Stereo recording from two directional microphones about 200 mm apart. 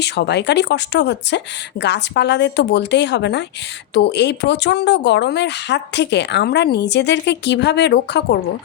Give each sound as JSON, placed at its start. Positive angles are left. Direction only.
{"t": 0.0, "sound": "speech", "side_deg": 55}